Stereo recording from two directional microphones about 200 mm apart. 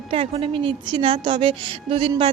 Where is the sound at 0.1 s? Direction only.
25° right (ahead or behind).